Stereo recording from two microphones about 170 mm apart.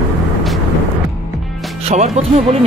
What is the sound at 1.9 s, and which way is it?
Speech, 40° right (ahead or behind).